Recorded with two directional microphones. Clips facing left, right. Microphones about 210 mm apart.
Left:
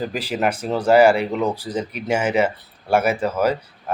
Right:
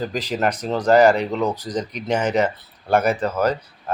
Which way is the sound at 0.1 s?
10° left (ahead or behind).